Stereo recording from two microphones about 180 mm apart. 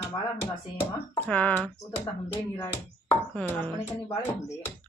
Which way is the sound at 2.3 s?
20° left (ahead or behind).